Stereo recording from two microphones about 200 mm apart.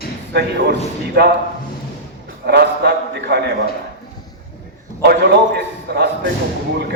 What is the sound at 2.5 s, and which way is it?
A man's voice, 55° right (ahead or behind).